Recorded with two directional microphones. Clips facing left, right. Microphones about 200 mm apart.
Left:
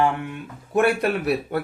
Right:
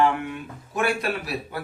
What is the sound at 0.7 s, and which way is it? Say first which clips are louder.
Speech: left 6 dB; 60° left (ahead or behind).